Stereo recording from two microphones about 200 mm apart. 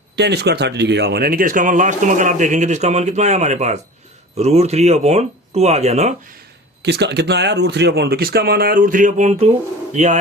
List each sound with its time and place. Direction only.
0.2 s speech: 55° right (ahead or behind); by 6.1 s 35° right (ahead or behind)
6.8 s speech: 55° right (ahead or behind); by 10.2 s 35° right (ahead or behind)